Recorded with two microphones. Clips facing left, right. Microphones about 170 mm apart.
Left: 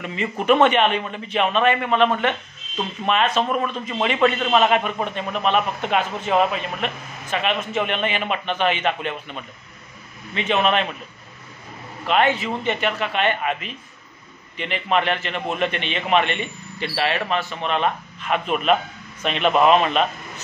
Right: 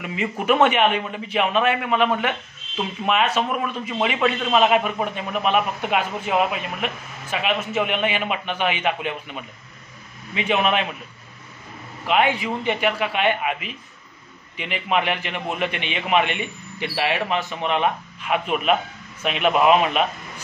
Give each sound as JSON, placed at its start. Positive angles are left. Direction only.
{"t": 0.0, "sound": "a man's voice", "side_deg": -5}
{"t": 12.1, "sound": "a man's voice", "side_deg": -10}